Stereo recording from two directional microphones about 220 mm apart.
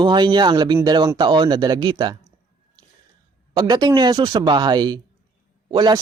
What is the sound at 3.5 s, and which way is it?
Speech, 20° right (ahead or behind).